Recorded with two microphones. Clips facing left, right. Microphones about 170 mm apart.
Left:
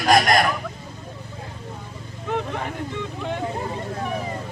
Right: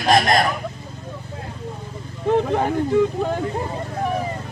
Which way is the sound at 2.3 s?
40° right (ahead or behind).